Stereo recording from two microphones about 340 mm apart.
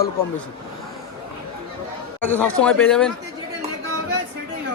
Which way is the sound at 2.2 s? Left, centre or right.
Centre.